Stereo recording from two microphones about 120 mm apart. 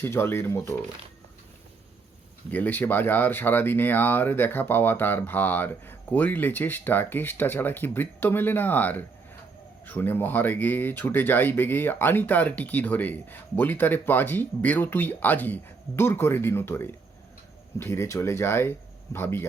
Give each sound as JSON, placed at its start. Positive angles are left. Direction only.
{"t": 0.0, "sound": "speech", "side_deg": 20}
{"t": 2.5, "sound": "speech", "side_deg": 15}